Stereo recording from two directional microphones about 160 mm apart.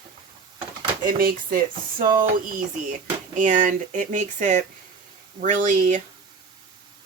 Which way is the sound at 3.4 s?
55° right (ahead or behind).